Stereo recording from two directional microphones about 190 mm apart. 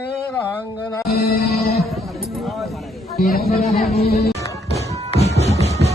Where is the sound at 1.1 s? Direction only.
55° left (ahead or behind).